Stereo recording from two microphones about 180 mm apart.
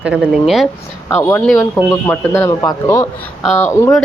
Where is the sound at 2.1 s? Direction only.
15° left (ahead or behind).